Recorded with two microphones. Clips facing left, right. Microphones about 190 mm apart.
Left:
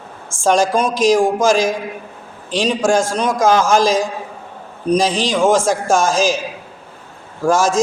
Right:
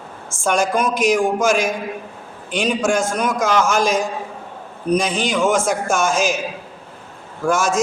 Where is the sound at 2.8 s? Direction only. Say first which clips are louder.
Left 5 dB; 90° left.